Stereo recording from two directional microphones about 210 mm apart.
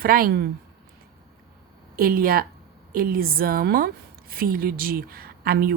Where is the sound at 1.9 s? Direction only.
45° right (ahead or behind).